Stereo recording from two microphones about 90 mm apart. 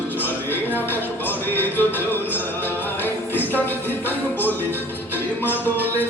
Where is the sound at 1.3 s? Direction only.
20° left (ahead or behind).